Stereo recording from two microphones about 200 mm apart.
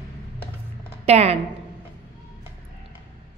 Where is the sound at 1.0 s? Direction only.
30° right (ahead or behind).